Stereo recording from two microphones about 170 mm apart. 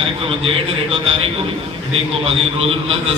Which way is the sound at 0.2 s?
35° right (ahead or behind).